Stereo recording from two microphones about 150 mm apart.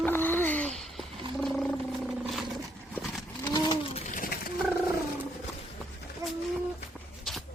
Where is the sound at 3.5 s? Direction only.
30° left (ahead or behind).